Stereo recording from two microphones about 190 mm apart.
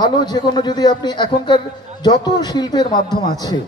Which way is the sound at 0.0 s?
20° left (ahead or behind).